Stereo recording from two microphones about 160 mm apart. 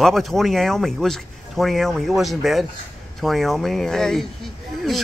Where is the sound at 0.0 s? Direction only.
Centre (ahead or behind).